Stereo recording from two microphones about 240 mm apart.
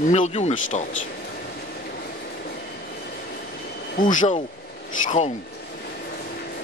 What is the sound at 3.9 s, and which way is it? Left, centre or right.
Speech, left.